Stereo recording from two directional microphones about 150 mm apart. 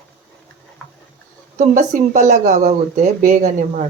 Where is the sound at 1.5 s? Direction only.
55° right (ahead or behind).